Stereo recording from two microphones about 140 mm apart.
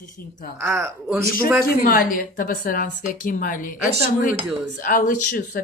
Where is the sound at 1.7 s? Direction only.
85° left.